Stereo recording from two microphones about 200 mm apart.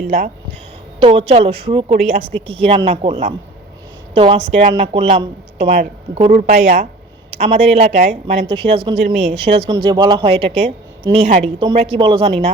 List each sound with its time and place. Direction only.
0.9 s speech: 30° right (ahead or behind)
5.6 s a woman's voice: 45° right (ahead or behind)
11.6 s speech: 25° right (ahead or behind)